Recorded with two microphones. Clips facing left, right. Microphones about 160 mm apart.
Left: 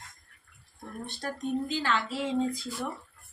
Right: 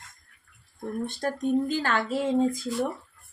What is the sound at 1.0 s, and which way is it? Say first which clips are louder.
Speech: right 6 dB; 50° right (ahead or behind).